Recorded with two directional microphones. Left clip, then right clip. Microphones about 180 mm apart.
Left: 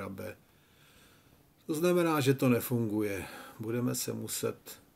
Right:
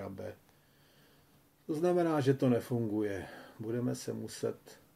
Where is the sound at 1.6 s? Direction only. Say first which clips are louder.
Left 2 dB; 15° left (ahead or behind).